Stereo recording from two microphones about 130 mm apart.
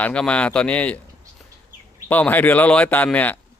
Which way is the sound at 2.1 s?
10° left (ahead or behind).